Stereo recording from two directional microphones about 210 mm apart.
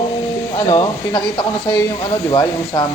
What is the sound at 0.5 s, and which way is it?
Speech, 20° left (ahead or behind).